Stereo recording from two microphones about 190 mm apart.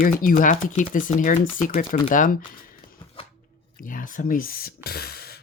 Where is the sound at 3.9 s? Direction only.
45° left (ahead or behind).